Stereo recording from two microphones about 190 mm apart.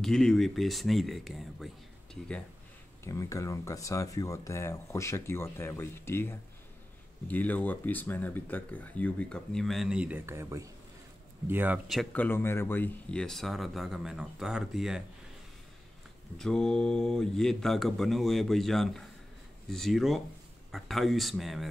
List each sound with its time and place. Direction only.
0.0 s speech: 5° left (ahead or behind)
3.0 s speech: 15° left (ahead or behind); by 15.0 s centre (ahead or behind)
16.3 s speech: 5° left (ahead or behind)